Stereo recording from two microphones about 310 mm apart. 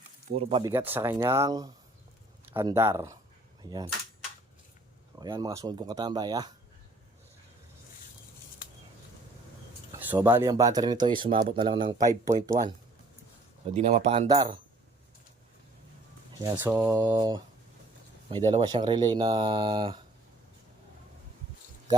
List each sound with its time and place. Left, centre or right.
0.3 s speech: centre
5.2 s speech: centre
10.0 s speech: centre
13.7 s speech: right
16.4 s speech: centre